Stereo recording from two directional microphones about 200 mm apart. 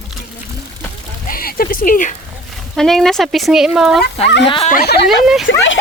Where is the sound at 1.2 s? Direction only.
45° left (ahead or behind).